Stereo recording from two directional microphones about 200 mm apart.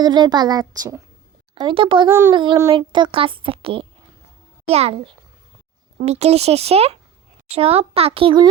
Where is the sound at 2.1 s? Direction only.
10° right (ahead or behind).